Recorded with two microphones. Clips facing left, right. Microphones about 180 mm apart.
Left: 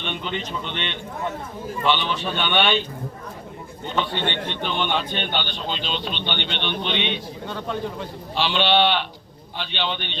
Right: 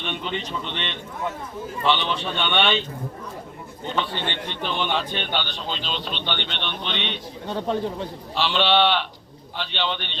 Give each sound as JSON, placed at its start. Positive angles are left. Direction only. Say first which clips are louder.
{"t": 0.0, "sound": "a man's voice", "louder": "even", "side_deg": 0}
{"t": 4.0, "sound": "a man's voice", "louder": "left 3 dB", "side_deg": -35}
{"t": 4.3, "sound": "a man's voice", "louder": "left 2 dB", "side_deg": 0}
{"t": 7.5, "sound": "a man's voice", "louder": "right 4 dB", "side_deg": -30}
{"t": 8.4, "sound": "a man's voice", "louder": "even", "side_deg": 0}